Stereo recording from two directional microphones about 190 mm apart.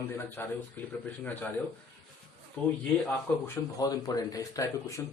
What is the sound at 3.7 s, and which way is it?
Speech, 20° left (ahead or behind).